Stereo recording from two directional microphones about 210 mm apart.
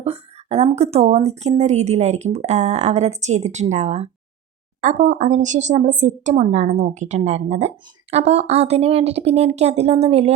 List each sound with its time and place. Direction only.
0.0 s speech: 30° right (ahead or behind)